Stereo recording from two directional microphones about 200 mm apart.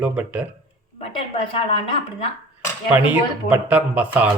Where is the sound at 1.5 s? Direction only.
25° left (ahead or behind).